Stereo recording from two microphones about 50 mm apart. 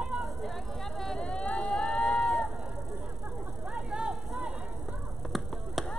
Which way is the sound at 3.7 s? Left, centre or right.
Centre.